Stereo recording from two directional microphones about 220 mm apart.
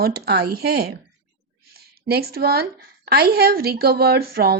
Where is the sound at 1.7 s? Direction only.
45° right (ahead or behind).